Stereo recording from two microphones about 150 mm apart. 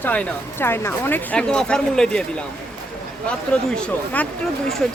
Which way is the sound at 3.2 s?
5° left (ahead or behind).